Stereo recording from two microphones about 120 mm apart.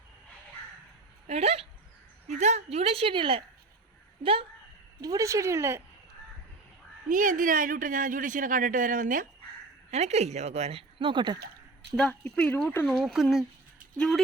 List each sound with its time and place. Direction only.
1.3 s a woman's voice: 60° right (ahead or behind)
2.2 s a woman's voice: 70° right (ahead or behind); by 4.4 s 50° right (ahead or behind)
4.9 s speech: 30° right (ahead or behind)
7.1 s speech: 90° right
9.9 s a woman's voice: 65° right (ahead or behind); by 11.3 s 40° right (ahead or behind)
11.9 s speech: 10° left (ahead or behind)